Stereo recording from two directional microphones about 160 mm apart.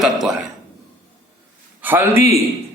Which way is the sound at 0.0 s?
Centre (ahead or behind).